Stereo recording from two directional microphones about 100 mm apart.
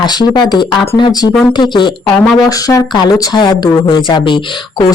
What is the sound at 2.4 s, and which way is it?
Speech, 35° left (ahead or behind).